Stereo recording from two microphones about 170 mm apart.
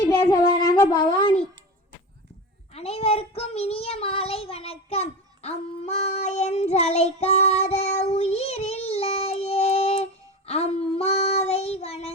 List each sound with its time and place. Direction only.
0.2 s a child's voice: 20° left (ahead or behind)
2.7 s a child's voice: 35° left (ahead or behind)